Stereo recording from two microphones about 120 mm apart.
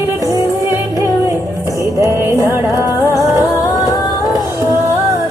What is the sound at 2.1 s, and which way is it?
Music, 20° right (ahead or behind).